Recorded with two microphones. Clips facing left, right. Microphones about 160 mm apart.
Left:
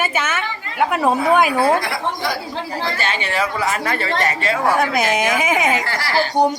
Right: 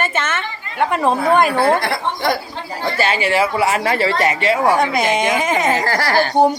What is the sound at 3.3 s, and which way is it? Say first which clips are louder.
Speech: right 4 dB; 25° right (ahead or behind).